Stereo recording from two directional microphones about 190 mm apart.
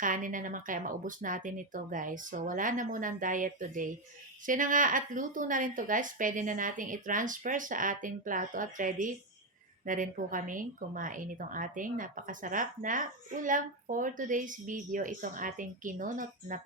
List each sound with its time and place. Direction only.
0.0 s a woman's voice: 45° right (ahead or behind)